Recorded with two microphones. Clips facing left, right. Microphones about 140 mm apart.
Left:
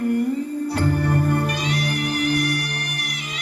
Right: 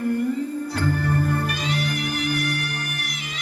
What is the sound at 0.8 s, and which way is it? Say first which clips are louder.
Music: left 2 dB; 35° left (ahead or behind).